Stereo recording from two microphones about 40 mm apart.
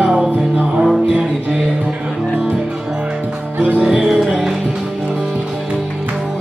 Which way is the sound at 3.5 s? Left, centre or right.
Right.